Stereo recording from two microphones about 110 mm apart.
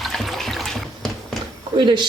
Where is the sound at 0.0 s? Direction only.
Centre (ahead or behind).